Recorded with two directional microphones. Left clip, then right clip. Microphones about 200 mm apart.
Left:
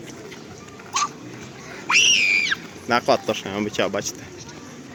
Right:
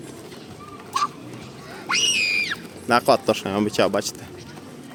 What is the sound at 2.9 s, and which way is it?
Speech, 20° right (ahead or behind).